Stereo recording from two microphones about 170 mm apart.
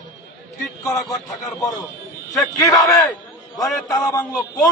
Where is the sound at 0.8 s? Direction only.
20° left (ahead or behind).